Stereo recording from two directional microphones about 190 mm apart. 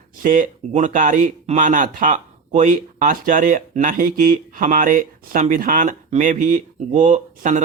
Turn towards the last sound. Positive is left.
turn(degrees=-40)  # may be behind; listen again after turning